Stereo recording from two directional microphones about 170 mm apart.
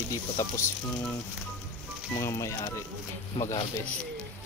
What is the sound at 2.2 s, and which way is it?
Speech, 15° left (ahead or behind).